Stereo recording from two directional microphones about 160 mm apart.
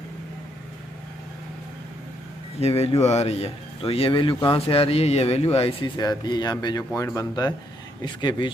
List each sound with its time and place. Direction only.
2.6 s speech: 40° left (ahead or behind)
6.0 s speech: 25° left (ahead or behind)